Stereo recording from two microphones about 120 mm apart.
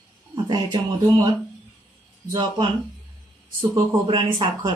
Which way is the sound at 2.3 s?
40° right (ahead or behind).